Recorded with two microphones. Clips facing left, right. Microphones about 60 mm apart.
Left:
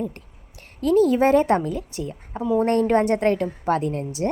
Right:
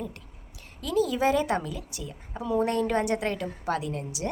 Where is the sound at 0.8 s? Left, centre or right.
Left.